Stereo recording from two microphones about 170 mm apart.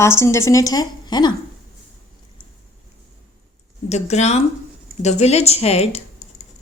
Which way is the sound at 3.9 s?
40° left (ahead or behind).